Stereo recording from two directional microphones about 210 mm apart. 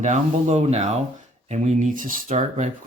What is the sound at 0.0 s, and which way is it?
Speech, 35° right (ahead or behind).